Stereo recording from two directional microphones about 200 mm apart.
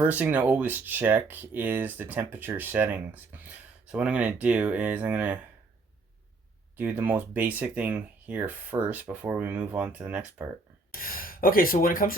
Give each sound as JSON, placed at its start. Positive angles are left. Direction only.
{"t": 0.0, "sound": "speech", "side_deg": -10}
{"t": 6.7, "sound": "speech", "side_deg": -10}
{"t": 10.9, "sound": "speech", "side_deg": 45}